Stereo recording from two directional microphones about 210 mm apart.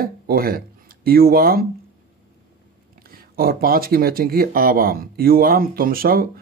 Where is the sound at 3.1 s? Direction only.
45° right (ahead or behind).